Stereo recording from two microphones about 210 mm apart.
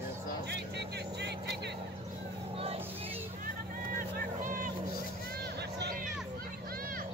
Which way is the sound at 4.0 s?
40° right (ahead or behind).